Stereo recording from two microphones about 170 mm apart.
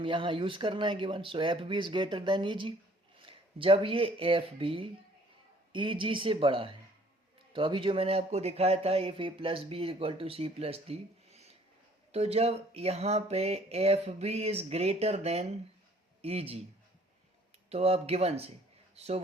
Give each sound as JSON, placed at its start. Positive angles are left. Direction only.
{"t": 0.0, "sound": "speech", "side_deg": -30}
{"t": 17.7, "sound": "speech", "side_deg": -35}